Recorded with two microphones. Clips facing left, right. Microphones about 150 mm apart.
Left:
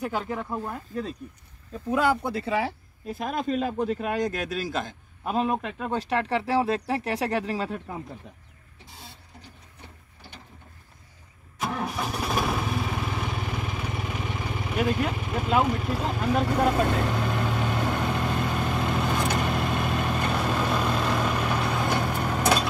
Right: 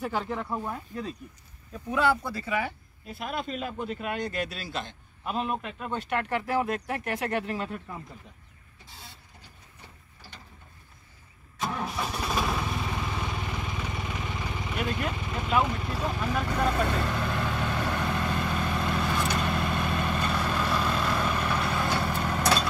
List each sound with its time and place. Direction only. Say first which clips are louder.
0.0 s speech: left 1 dB; centre (ahead or behind)
1.9 s speech: left 2 dB; 45° left (ahead or behind)
2.2 s speech: left 4 dB; 25° left (ahead or behind)
3.1 s a man's voice: left 6 dB; 40° left (ahead or behind)
11.6 s vehicle: left 2 dB; 10° left (ahead or behind)
15.6 s speech: left 4 dB; 10° left (ahead or behind)
16.0 s speech: left 3 dB; 25° left (ahead or behind)
17.1 s vehicle: left 3 dB; 5° left (ahead or behind)
20.8 s vehicle: left 2 dB; 5° left (ahead or behind)
21.8 s vehicle: left 2 dB; 15° left (ahead or behind)